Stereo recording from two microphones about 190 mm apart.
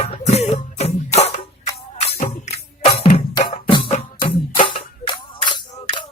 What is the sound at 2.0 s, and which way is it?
Music, 40° left (ahead or behind).